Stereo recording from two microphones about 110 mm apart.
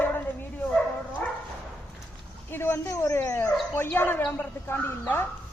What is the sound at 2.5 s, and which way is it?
Speech, 20° left (ahead or behind).